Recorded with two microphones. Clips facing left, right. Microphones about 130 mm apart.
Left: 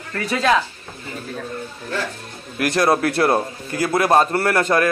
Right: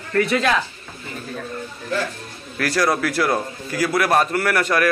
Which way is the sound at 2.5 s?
20° left (ahead or behind).